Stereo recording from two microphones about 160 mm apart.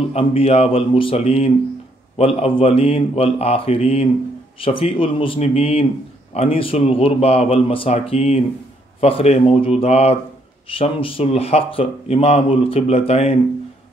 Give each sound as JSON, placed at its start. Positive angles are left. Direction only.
{"t": 0.1, "sound": "speech", "side_deg": 35}